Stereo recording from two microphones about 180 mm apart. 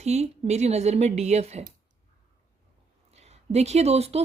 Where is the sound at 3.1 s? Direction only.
35° right (ahead or behind).